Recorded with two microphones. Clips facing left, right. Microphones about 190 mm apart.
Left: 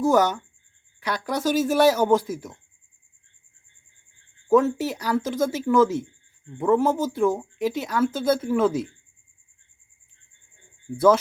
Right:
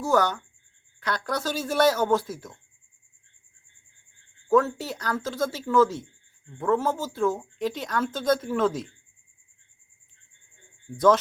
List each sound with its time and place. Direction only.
0.0 s speech: 15° left (ahead or behind)
4.4 s speech: 15° left (ahead or behind)
10.9 s speech: 10° left (ahead or behind)